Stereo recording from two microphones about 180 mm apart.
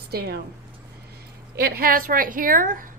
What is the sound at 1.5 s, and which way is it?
A woman's voice, 60° right (ahead or behind).